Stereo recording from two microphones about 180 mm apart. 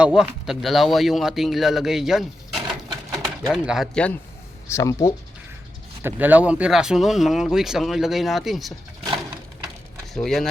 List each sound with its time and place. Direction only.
0.0 s speech: 5° right (ahead or behind)
4.7 s speech: 15° left (ahead or behind)
6.0 s speech: 10° right (ahead or behind)
10.2 s speech: centre (ahead or behind)